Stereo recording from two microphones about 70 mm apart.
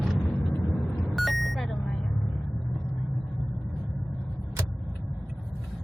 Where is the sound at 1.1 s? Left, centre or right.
Centre.